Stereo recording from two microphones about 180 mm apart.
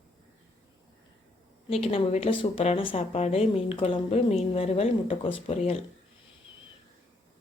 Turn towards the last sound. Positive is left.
turn(degrees=30)  # may be behind; listen again after turning